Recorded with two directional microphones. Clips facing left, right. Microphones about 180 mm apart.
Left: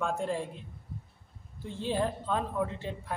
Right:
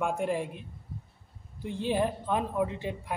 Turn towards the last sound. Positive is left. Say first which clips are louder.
# right 3 dB
turn(degrees=-15)  # may be behind; listen again after turning